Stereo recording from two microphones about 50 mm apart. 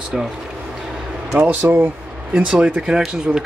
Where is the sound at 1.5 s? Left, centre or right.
Right.